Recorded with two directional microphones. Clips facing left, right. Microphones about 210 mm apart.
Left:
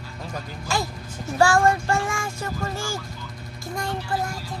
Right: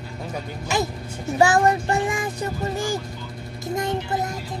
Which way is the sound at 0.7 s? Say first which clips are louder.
Right 3 dB; 20° right (ahead or behind).